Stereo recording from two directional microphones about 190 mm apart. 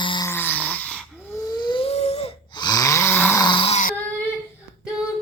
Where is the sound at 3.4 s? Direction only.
25° left (ahead or behind).